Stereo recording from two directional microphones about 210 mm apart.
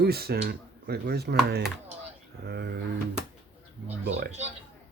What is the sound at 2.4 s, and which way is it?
Speech, 50° right (ahead or behind).